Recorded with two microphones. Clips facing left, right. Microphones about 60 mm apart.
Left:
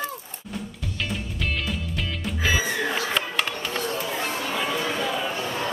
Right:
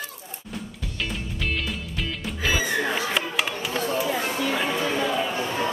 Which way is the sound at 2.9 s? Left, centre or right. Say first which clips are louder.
Even; centre.